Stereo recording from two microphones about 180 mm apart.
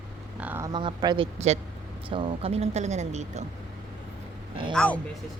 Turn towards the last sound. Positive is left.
turn(degrees=5)  # may be behind; listen again after turning